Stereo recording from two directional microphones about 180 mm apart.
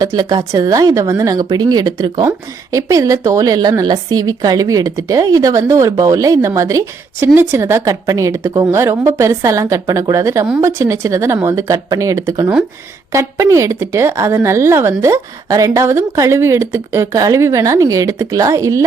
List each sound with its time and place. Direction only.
0.0 s a woman's voice: 20° right (ahead or behind)